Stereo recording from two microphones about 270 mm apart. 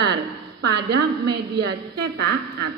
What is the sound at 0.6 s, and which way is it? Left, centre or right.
Speech, right.